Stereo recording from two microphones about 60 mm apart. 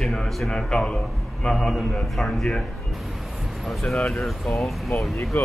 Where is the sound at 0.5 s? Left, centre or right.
Centre.